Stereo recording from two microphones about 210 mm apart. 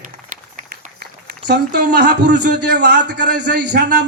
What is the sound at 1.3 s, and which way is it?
A man's voice, 50° right (ahead or behind).